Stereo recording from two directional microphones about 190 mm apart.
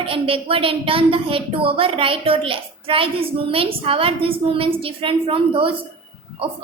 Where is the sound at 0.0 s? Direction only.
30° right (ahead or behind).